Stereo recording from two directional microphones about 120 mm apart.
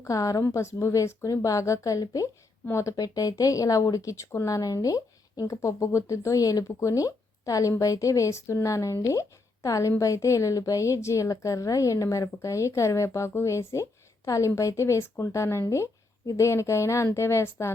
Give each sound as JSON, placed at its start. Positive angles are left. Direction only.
{"t": 0.0, "sound": "speech", "side_deg": 30}